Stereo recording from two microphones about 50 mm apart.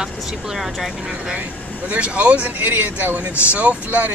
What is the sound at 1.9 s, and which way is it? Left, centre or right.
Speech, right.